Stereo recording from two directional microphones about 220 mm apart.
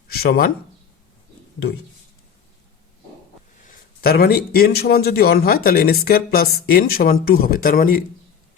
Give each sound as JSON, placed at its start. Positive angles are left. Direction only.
{"t": 0.1, "sound": "speech", "side_deg": 45}
{"t": 3.6, "sound": "a man's voice", "side_deg": 40}